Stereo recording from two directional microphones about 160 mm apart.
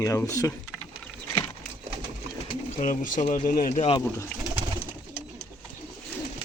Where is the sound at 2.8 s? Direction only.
55° left (ahead or behind).